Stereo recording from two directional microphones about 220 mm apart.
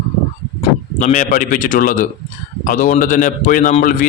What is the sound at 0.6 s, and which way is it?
A man's voice, 35° left (ahead or behind).